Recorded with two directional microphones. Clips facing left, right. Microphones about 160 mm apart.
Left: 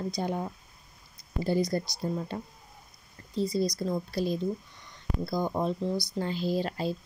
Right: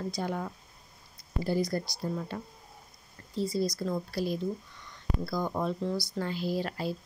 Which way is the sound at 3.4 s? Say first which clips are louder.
Left 2 dB; 20° left (ahead or behind).